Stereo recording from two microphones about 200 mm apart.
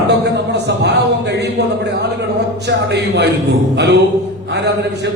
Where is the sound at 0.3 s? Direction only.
60° right (ahead or behind).